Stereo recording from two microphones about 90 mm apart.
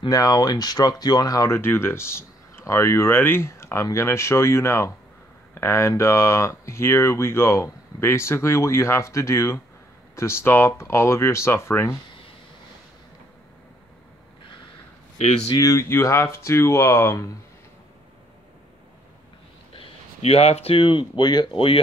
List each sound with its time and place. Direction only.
0.1 s speech: 45° left (ahead or behind)
1.5 s speech: 25° left (ahead or behind)
15.5 s speech: 35° left (ahead or behind)
19.7 s speech: 90° left; by 21.5 s 55° left (ahead or behind)